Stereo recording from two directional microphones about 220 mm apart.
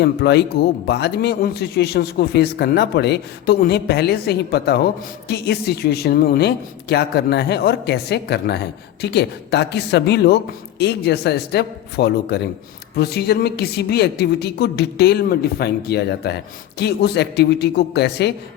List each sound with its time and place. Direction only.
0.0 s a man's voice: 50° left (ahead or behind)